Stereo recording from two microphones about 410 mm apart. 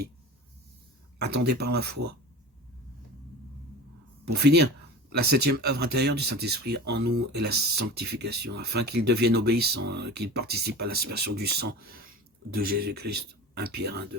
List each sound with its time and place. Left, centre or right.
1.2 s speech: right
4.3 s speech: right